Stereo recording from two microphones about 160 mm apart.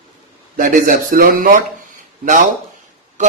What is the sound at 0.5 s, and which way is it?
Speech, 55° right (ahead or behind).